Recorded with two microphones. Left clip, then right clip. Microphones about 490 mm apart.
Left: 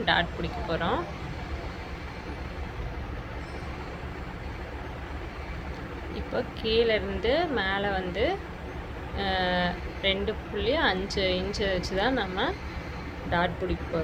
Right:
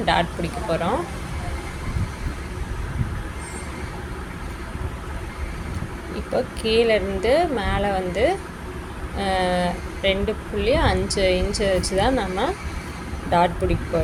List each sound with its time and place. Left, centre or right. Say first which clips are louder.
0.0 s speech: right 5 dB; left
6.3 s speech: right 6 dB; left